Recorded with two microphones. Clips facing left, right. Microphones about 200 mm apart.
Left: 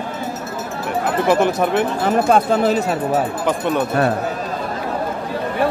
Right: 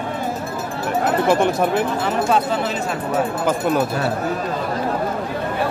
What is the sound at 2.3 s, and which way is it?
Speech, 45° left (ahead or behind).